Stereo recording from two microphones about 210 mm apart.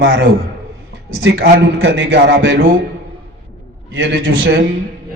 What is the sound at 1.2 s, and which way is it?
A man's voice, 55° right (ahead or behind).